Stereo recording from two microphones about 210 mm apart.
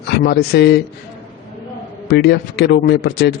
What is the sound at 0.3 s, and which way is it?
Speech, 50° left (ahead or behind).